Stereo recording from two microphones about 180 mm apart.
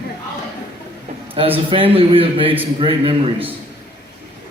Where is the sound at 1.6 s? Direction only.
30° right (ahead or behind).